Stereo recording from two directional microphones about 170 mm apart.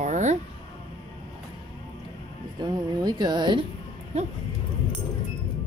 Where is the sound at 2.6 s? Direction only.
25° right (ahead or behind).